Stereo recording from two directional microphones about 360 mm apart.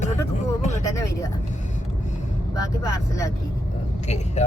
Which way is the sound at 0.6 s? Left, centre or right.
Centre.